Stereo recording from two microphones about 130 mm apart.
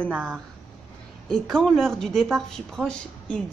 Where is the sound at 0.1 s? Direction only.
10° right (ahead or behind).